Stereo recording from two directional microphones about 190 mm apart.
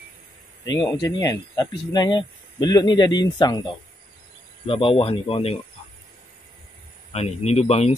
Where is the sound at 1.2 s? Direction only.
20° left (ahead or behind).